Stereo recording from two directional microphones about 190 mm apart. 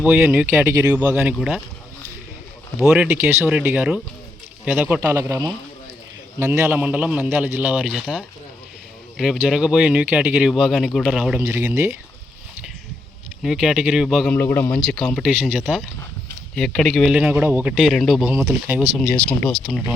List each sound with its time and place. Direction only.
0.0 s a man's voice: 10° right (ahead or behind)
2.9 s a man's voice: 5° right (ahead or behind)
13.4 s speech: centre (ahead or behind)
14.3 s speech: 10° left (ahead or behind); by 18.9 s 5° right (ahead or behind)
18.9 s speech: 5° left (ahead or behind)